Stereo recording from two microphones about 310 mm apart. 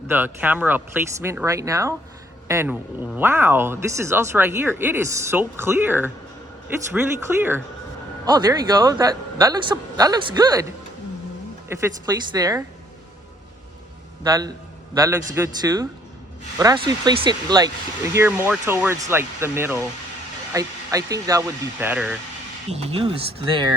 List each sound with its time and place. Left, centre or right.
0.1 s speech: centre
7.3 s speech: centre
11.7 s speech: centre
14.3 s speech: centre
22.8 s speech: centre